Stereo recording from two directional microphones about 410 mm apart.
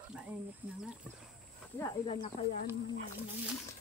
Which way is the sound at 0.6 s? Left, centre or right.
Centre.